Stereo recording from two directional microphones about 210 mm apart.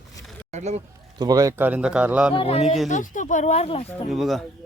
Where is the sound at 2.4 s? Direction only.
30° left (ahead or behind).